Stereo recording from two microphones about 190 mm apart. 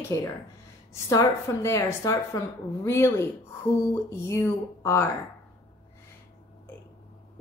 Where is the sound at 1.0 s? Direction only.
15° left (ahead or behind).